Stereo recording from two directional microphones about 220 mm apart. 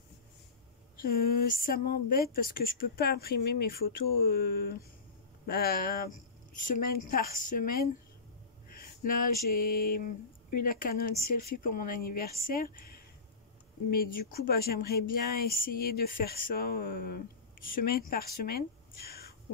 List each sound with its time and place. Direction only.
1.0 s a woman's voice: 45° left (ahead or behind)
8.7 s a sound: 40° left (ahead or behind)
10.5 s a woman's voice: 40° left (ahead or behind)